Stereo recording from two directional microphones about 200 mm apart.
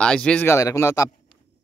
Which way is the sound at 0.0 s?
5° left (ahead or behind).